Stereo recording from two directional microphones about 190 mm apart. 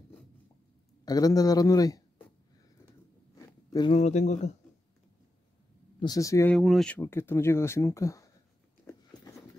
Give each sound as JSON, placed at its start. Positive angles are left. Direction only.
{"t": 1.0, "sound": "a man's voice", "side_deg": 20}
{"t": 3.3, "sound": "a sound", "side_deg": 20}
{"t": 3.9, "sound": "speech", "side_deg": 35}
{"t": 5.9, "sound": "speech", "side_deg": 20}
{"t": 6.5, "sound": "speech", "side_deg": 0}